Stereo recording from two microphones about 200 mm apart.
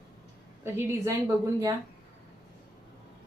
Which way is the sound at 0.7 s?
15° right (ahead or behind).